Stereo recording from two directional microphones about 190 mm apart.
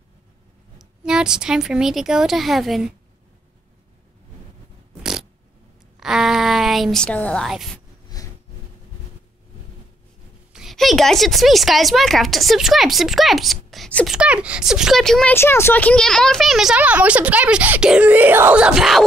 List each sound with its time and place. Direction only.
0.7 s speech: 5° right (ahead or behind)
5.9 s speech: centre (ahead or behind)
8.2 s a sound: 20° left (ahead or behind)
10.5 s a woman's voice: centre (ahead or behind)
15.3 s speech: 15° left (ahead or behind)